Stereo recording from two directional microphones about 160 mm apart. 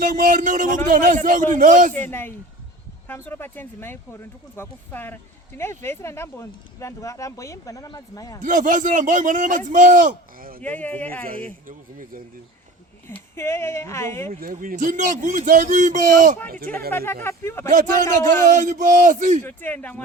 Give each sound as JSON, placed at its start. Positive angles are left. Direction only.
{"t": 0.0, "sound": "a man's voice", "side_deg": -50}
{"t": 1.9, "sound": "speech", "side_deg": 10}
{"t": 8.4, "sound": "a man's voice", "side_deg": -55}
{"t": 10.6, "sound": "speech", "side_deg": 10}
{"t": 13.1, "sound": "speech", "side_deg": 15}
{"t": 14.4, "sound": "a man's voice", "side_deg": -60}
{"t": 16.9, "sound": "speech", "side_deg": 15}
{"t": 17.7, "sound": "a man's voice", "side_deg": -50}
{"t": 19.5, "sound": "speech", "side_deg": 10}